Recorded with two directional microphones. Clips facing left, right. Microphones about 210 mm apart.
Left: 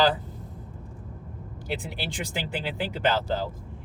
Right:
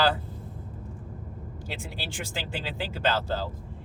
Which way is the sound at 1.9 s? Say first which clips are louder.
Left 3 dB; 15° left (ahead or behind).